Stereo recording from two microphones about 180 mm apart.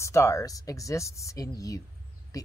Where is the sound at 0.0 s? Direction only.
15° left (ahead or behind).